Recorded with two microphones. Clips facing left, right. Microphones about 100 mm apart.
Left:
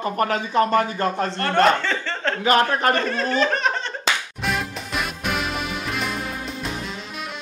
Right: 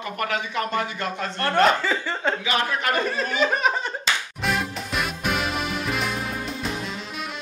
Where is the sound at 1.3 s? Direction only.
5° right (ahead or behind).